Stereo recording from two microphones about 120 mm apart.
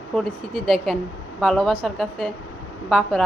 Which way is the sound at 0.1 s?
Centre (ahead or behind).